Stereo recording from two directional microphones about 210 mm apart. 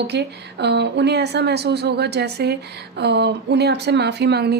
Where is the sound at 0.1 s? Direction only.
55° right (ahead or behind).